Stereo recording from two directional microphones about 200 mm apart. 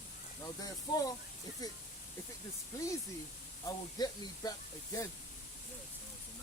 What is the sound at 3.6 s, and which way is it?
Speech, 20° left (ahead or behind).